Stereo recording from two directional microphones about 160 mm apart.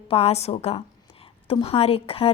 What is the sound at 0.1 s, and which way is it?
A woman's voice, 40° left (ahead or behind).